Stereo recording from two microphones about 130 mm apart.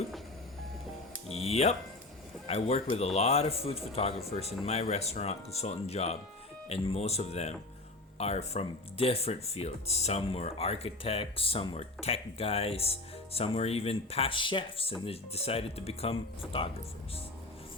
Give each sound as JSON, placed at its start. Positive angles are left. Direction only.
{"t": 1.3, "sound": "music", "side_deg": 50}
{"t": 2.5, "sound": "speech", "side_deg": 55}